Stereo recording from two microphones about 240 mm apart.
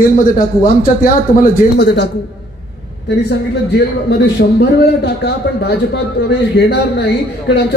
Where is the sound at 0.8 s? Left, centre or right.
Left.